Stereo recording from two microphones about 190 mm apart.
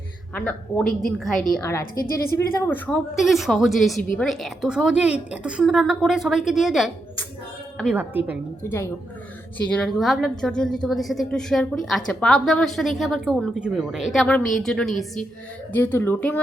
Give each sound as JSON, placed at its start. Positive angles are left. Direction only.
{"t": 0.3, "sound": "a woman's voice", "side_deg": 5}
{"t": 1.8, "sound": "a woman's voice", "side_deg": 50}
{"t": 2.3, "sound": "speech", "side_deg": 15}
{"t": 3.2, "sound": "a woman's voice", "side_deg": 0}
{"t": 8.6, "sound": "a woman's voice", "side_deg": 15}
{"t": 15.7, "sound": "speech", "side_deg": 10}